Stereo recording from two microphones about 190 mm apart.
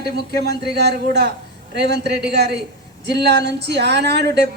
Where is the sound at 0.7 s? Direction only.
60° right (ahead or behind).